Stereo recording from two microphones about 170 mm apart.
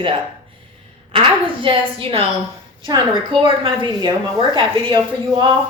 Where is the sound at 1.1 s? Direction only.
30° right (ahead or behind).